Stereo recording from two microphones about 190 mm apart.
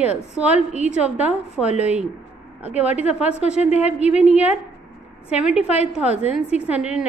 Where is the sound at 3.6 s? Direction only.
35° left (ahead or behind).